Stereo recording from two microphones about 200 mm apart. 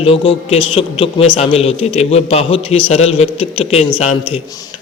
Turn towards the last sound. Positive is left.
turn(degrees=30)  # may be behind; listen again after turning